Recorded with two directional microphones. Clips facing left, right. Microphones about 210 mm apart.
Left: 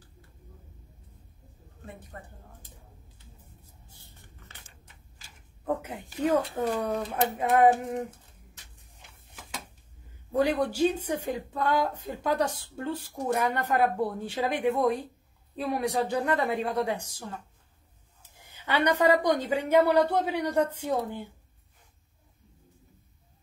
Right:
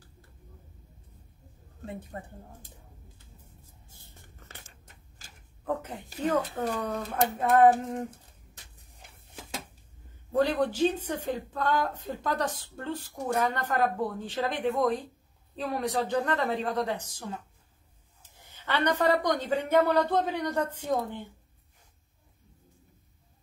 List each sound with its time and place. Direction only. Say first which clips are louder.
1.9 s speech: right 5 dB; 25° right (ahead or behind)
3.9 s a sound: right 1 dB; 45° right (ahead or behind)
5.7 s a woman's voice: left 2 dB; 10° left (ahead or behind)
10.3 s a woman's voice: even; 10° left (ahead or behind)
18.2 s a woman's voice: left 1 dB; 10° left (ahead or behind)